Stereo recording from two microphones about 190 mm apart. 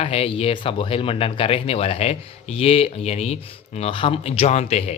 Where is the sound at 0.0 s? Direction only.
30° left (ahead or behind).